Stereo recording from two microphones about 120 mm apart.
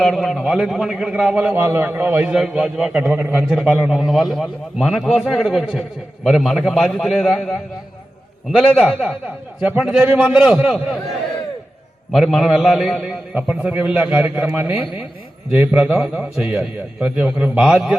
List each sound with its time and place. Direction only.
0.0 s a man's voice: centre (ahead or behind)
12.1 s a man's voice: centre (ahead or behind)